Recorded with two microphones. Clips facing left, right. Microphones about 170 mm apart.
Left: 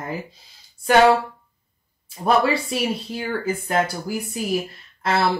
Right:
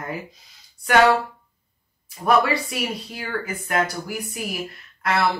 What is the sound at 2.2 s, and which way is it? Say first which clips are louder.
Speech: left 1 dB; 30° left (ahead or behind).